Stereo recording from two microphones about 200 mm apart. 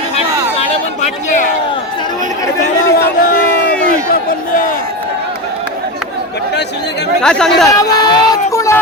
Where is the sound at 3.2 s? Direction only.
45° left (ahead or behind).